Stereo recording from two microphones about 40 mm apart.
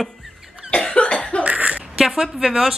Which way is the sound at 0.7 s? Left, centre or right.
Left.